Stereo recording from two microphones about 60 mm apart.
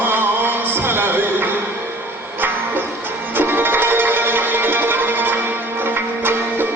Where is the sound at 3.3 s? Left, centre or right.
Right.